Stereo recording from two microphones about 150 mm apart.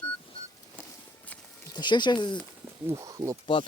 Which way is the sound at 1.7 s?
30° left (ahead or behind).